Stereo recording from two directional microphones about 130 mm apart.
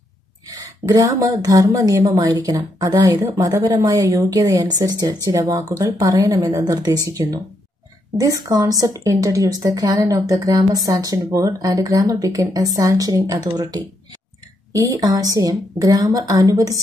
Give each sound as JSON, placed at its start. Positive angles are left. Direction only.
{"t": 0.5, "sound": "a woman's voice", "side_deg": -30}